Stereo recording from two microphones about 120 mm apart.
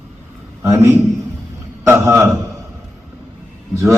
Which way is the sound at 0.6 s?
20° right (ahead or behind).